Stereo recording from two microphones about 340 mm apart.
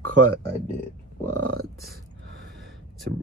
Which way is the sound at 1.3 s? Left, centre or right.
Right.